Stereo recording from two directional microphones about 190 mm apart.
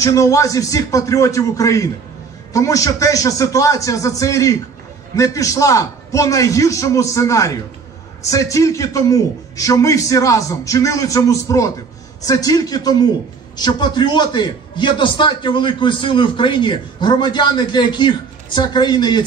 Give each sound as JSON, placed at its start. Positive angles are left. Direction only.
{"t": 0.0, "sound": "a man's voice", "side_deg": 15}